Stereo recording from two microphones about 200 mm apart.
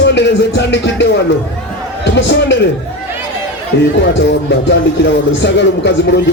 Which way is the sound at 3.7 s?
60° left (ahead or behind).